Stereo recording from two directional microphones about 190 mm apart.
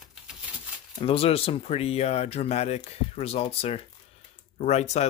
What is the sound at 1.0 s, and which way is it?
Speech, 30° left (ahead or behind).